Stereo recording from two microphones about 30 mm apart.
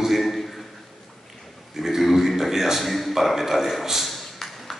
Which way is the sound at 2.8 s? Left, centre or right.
Centre.